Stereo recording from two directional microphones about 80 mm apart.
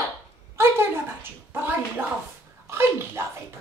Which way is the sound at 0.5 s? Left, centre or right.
Right.